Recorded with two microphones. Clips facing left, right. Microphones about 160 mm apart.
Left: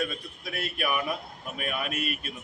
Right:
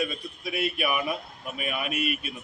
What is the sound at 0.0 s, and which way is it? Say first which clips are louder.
A man's voice: right 2 dB; 5° right (ahead or behind).